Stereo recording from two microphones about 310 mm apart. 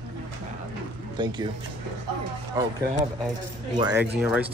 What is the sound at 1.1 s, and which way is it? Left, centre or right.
Speech, centre.